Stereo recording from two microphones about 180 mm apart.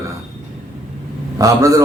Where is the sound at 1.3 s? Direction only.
20° right (ahead or behind).